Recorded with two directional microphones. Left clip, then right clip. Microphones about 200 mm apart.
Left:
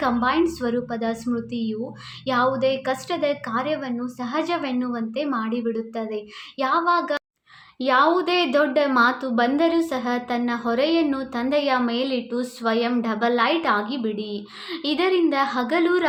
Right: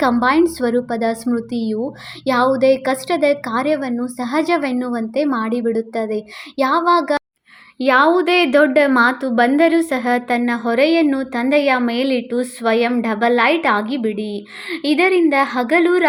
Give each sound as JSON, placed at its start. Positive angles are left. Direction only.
{"t": 0.0, "sound": "a woman's voice", "side_deg": -40}